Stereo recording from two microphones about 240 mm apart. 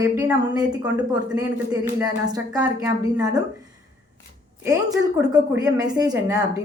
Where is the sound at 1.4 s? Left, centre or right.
Centre.